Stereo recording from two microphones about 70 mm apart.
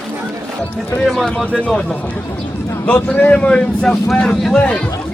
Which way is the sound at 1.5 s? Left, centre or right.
Centre.